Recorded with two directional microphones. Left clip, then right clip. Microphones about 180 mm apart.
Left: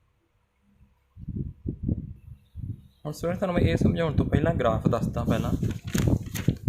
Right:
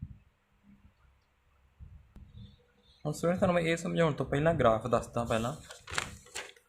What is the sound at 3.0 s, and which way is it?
Speech, 20° left (ahead or behind).